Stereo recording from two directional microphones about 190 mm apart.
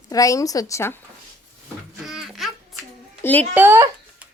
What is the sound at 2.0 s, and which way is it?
Babbling, centre (ahead or behind).